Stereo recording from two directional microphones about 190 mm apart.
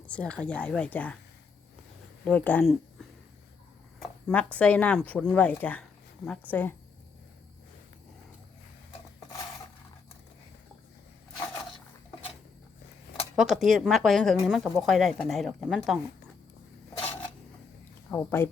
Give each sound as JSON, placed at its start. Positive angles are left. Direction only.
{"t": 0.1, "sound": "speech", "side_deg": 5}
{"t": 2.2, "sound": "speech", "side_deg": 5}
{"t": 4.3, "sound": "speech", "side_deg": 5}
{"t": 13.3, "sound": "speech", "side_deg": 0}
{"t": 18.1, "sound": "speech", "side_deg": 10}